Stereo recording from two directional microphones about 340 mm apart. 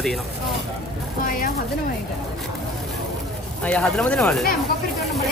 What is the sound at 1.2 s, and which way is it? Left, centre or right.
Speech, left.